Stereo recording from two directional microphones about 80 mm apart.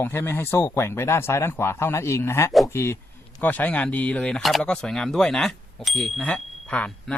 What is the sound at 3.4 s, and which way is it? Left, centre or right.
Speech, left.